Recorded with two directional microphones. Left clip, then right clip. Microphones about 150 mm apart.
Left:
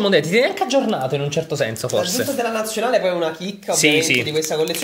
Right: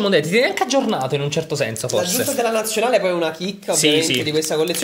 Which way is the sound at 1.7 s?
Centre (ahead or behind).